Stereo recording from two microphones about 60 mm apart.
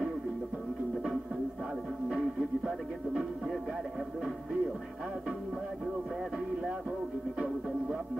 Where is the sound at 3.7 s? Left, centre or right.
Centre.